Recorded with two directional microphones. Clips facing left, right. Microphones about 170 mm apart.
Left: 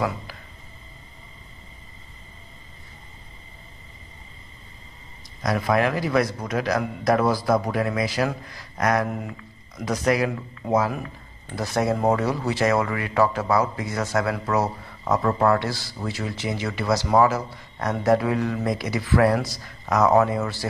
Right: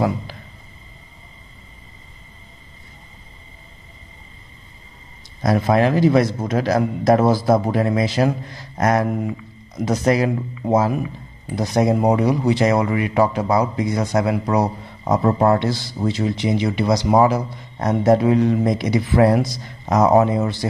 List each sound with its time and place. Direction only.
5.4 s speech: 30° right (ahead or behind)